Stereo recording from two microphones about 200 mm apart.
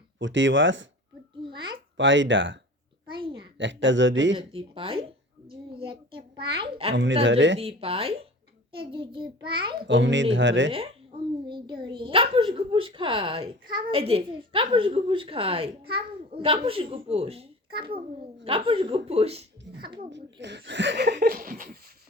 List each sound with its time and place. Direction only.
0.2 s speech: 65° right (ahead or behind)
1.5 s babbling: 25° right (ahead or behind)
2.0 s speech: 65° right (ahead or behind)
3.1 s a sound: 25° right (ahead or behind)
3.6 s speech: 65° right (ahead or behind)
4.4 s a child's voice: 25° right (ahead or behind)
6.9 s speech: 65° right (ahead or behind)
7.6 s speech: 30° right (ahead or behind)
9.8 s speech: 65° right (ahead or behind)
10.7 s speech: 30° right (ahead or behind)
20.1 s speech: 60° right (ahead or behind); by 21.8 s 45° right (ahead or behind)